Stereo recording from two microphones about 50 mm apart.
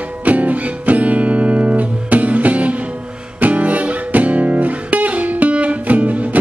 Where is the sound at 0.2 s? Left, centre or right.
Right.